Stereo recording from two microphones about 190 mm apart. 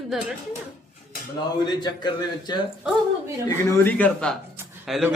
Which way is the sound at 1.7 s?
20° left (ahead or behind).